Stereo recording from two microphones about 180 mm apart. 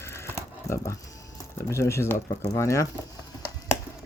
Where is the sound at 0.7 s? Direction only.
15° left (ahead or behind).